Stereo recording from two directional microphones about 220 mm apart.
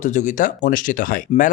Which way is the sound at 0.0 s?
35° left (ahead or behind).